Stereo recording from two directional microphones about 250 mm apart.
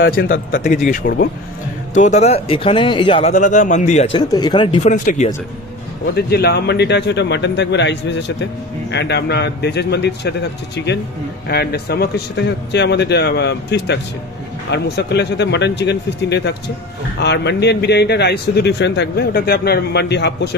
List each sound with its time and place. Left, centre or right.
0.0 s speech: left
2.0 s speech: left
6.1 s a man's voice: left
11.4 s a man's voice: left